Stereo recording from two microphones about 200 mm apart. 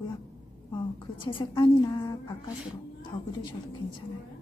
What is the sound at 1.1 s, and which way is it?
A woman's voice, 25° left (ahead or behind).